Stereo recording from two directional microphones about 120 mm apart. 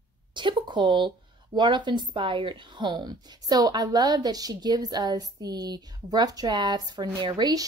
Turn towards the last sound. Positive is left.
turn(degrees=-35)  # may be behind; listen again after turning